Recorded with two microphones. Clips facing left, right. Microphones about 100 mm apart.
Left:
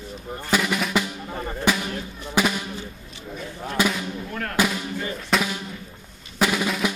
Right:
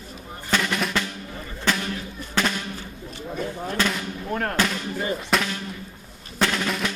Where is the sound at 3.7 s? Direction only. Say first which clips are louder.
Left 3 dB; 10° left (ahead or behind).